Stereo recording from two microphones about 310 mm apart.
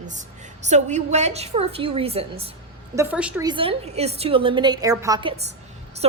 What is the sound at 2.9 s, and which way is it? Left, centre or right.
A woman's voice, centre.